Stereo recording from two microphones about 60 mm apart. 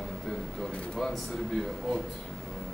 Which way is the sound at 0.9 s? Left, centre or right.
Centre.